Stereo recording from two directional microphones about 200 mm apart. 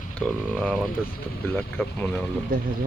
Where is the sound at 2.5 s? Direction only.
45° right (ahead or behind).